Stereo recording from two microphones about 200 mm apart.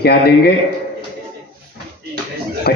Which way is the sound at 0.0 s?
50° left (ahead or behind).